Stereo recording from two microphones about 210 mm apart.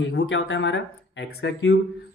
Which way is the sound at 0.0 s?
60° left (ahead or behind).